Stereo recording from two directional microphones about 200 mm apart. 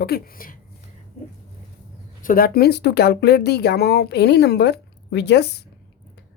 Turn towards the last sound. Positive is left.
turn(degrees=55)  # may be behind; listen again after turning